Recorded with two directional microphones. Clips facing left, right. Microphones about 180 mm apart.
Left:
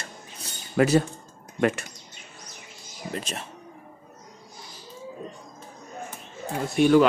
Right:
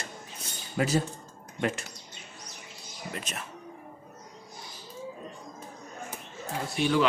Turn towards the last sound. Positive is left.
turn(degrees=50)  # may be behind; listen again after turning